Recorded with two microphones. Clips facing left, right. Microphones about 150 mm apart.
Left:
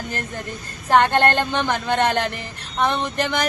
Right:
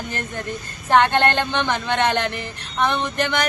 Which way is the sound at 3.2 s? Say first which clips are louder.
Right 1 dB; 35° left (ahead or behind).